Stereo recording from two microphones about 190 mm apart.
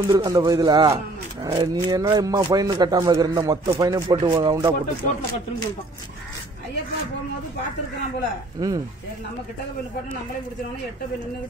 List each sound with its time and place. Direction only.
0.1 s speech: 20° right (ahead or behind)
8.5 s speech: 20° right (ahead or behind)